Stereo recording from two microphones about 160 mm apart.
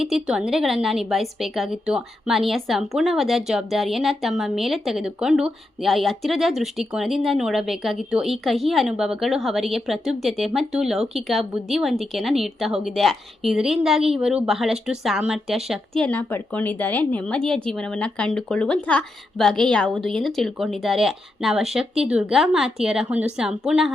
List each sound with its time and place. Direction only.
0.0 s a woman's voice: centre (ahead or behind)
16.0 s a woman's voice: 10° left (ahead or behind)